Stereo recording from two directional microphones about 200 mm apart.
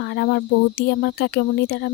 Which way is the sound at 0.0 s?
60° left (ahead or behind).